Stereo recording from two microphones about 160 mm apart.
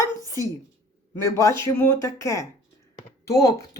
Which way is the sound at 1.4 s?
15° left (ahead or behind).